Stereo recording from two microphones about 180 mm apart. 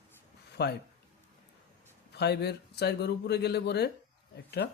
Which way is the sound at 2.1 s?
65° left (ahead or behind).